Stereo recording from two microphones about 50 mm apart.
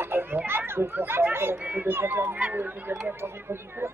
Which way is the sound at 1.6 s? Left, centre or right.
Right.